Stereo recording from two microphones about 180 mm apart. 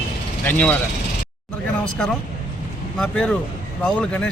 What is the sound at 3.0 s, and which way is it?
Speech, 5° left (ahead or behind).